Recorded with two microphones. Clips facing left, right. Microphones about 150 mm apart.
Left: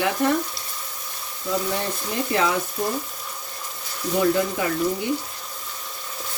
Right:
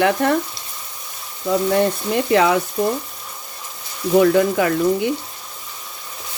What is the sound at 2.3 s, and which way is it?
Speech, 70° right (ahead or behind).